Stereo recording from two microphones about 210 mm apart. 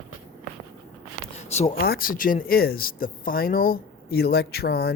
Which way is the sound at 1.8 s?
45° left (ahead or behind).